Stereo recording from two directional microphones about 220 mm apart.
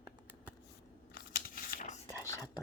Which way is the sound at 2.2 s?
15° left (ahead or behind).